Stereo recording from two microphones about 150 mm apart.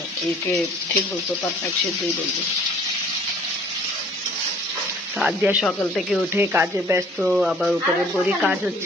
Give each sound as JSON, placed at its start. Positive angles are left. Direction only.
{"t": 5.2, "sound": "speech", "side_deg": -10}
{"t": 7.2, "sound": "speech", "side_deg": -5}